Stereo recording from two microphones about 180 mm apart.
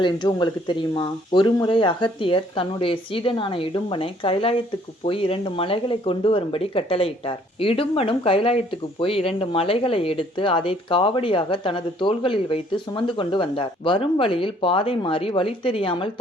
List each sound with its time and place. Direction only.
0.0 s speech: 25° left (ahead or behind)